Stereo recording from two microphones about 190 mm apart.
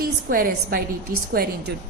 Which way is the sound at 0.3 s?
50° right (ahead or behind).